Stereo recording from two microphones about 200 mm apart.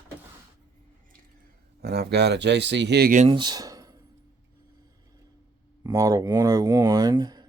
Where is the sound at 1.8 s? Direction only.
55° right (ahead or behind).